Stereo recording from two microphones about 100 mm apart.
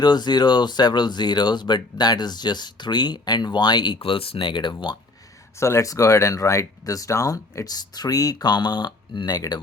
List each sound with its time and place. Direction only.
0.0 s speech: 45° left (ahead or behind)
4.0 s speech: 70° left (ahead or behind)
5.5 s speech: 30° left (ahead or behind); by 9.6 s 45° left (ahead or behind)